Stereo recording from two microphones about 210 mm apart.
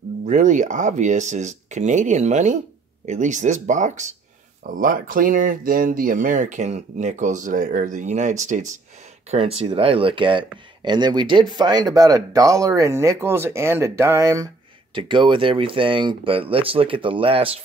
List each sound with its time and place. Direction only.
0.3 s speech: 35° right (ahead or behind)